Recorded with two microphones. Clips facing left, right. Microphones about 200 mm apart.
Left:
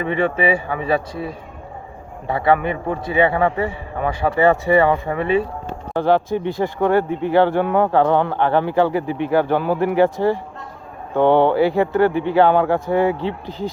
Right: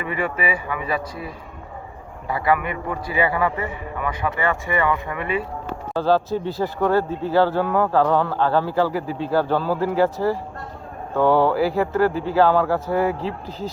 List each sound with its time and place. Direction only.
0.0 s speech: 30° left (ahead or behind)